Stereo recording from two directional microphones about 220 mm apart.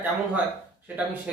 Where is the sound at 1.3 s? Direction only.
5° right (ahead or behind).